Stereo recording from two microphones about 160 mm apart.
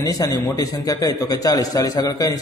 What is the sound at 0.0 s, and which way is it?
A man's voice, 20° left (ahead or behind).